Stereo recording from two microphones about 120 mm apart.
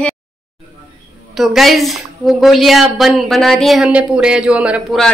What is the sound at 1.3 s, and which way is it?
A woman's voice, centre (ahead or behind).